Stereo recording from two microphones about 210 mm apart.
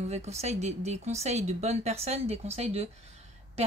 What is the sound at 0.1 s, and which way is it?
Speech, 30° right (ahead or behind).